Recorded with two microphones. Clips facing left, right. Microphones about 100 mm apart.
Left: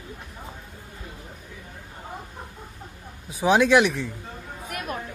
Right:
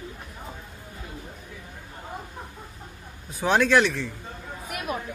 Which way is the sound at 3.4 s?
10° left (ahead or behind).